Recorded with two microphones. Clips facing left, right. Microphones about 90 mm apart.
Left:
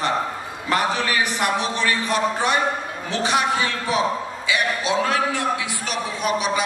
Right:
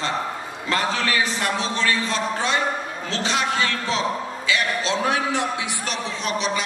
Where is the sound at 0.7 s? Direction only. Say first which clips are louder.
Left 2 dB; 15° left (ahead or behind).